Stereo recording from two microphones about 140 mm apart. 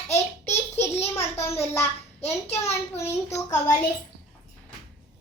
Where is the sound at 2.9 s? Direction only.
20° left (ahead or behind).